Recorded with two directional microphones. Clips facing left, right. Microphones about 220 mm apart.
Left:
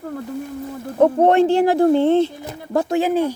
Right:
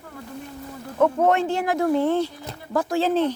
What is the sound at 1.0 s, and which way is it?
Speech, 35° left (ahead or behind).